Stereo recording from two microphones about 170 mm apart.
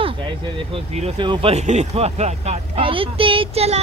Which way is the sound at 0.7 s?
35° right (ahead or behind).